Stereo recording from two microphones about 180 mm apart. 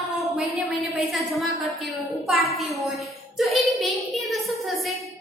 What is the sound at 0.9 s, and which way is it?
A woman's voice, centre (ahead or behind).